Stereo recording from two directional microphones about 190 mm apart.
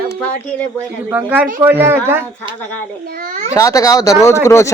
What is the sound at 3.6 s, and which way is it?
Speech, 15° left (ahead or behind).